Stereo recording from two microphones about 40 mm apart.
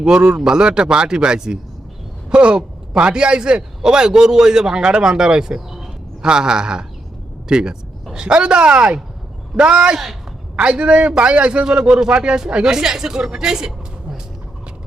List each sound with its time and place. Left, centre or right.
0.0 s a man's voice: right